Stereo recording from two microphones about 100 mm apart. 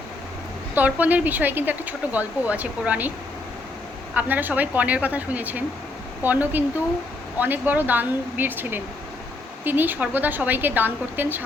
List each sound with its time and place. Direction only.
0.7 s speech: 15° right (ahead or behind)
4.1 s a woman's voice: 15° right (ahead or behind)